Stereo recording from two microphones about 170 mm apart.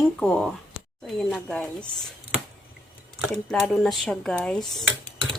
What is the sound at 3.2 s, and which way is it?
Speech, centre (ahead or behind).